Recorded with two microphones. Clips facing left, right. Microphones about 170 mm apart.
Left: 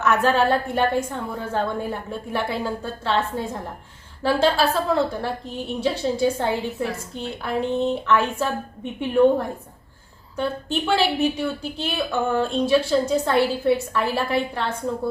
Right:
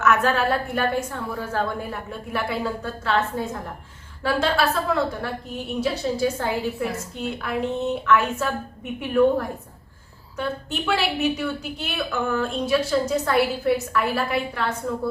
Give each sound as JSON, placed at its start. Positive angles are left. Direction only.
{"t": 0.0, "sound": "a woman's voice", "side_deg": 30}
{"t": 10.3, "sound": "a woman's voice", "side_deg": 30}